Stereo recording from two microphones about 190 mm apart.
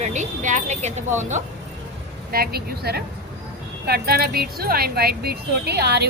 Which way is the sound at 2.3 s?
55° right (ahead or behind).